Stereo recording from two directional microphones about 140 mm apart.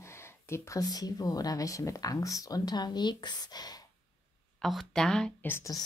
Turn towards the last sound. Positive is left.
turn(degrees=15)  # may be behind; listen again after turning